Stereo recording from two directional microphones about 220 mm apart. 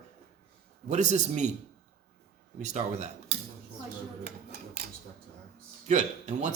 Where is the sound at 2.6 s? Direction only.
30° right (ahead or behind).